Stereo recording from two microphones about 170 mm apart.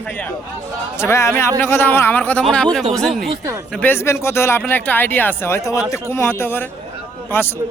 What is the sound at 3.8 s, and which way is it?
Speech, 15° left (ahead or behind).